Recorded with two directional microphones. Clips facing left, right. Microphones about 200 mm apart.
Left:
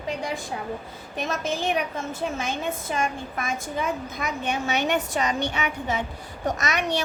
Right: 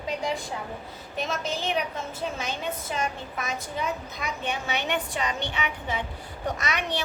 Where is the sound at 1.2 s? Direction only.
50° left (ahead or behind).